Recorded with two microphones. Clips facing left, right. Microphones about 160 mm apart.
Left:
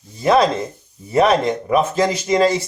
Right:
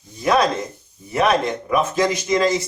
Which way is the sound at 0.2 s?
30° left (ahead or behind).